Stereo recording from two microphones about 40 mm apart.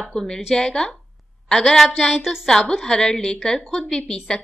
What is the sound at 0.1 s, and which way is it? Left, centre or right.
A woman's voice, left.